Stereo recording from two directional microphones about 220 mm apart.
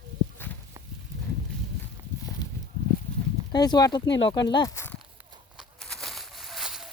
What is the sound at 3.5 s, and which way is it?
Speech, 20° left (ahead or behind).